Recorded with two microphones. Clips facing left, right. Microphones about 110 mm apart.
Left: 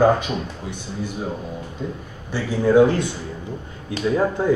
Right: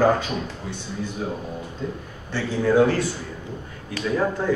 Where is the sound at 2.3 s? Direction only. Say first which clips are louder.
Left 3 dB; 15° left (ahead or behind).